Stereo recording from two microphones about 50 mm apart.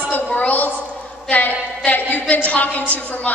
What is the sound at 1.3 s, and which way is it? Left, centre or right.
A woman's voice, left.